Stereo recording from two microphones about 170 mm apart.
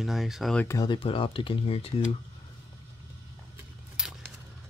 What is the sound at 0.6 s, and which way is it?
Speech, 25° left (ahead or behind).